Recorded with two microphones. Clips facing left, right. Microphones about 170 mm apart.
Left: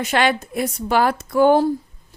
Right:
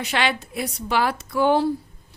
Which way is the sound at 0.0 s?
50° left (ahead or behind).